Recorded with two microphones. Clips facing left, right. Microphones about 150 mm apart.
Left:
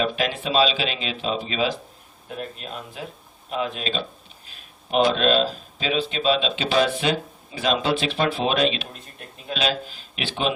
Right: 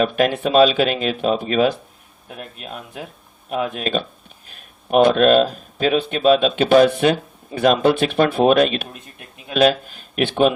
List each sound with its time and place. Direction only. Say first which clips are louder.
0.0 s speech: right 7 dB; 50° right (ahead or behind)
3.5 s speech: right 5 dB; 50° right (ahead or behind)